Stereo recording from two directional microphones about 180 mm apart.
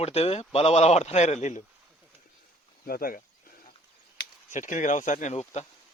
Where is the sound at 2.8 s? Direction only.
55° left (ahead or behind).